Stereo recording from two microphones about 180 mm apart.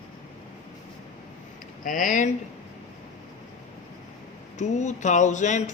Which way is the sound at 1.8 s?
45° left (ahead or behind).